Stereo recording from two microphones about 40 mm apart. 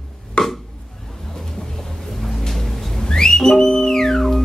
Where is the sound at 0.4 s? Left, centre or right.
Left.